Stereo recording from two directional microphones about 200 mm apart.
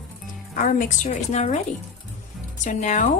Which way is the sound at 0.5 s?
40° left (ahead or behind).